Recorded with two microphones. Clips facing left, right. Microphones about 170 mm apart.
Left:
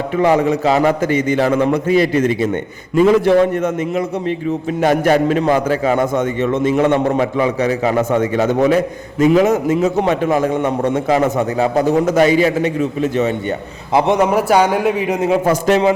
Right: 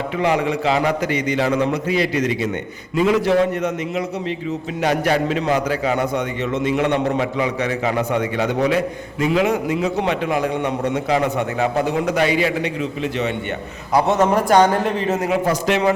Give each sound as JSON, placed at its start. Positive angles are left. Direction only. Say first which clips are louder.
{"t": 0.2, "sound": "a man's voice", "louder": "left 6 dB", "side_deg": 45}
{"t": 13.9, "sound": "a man's voice", "louder": "left 2 dB", "side_deg": 15}
{"t": 15.4, "sound": "a man's voice", "louder": "left 5 dB", "side_deg": 45}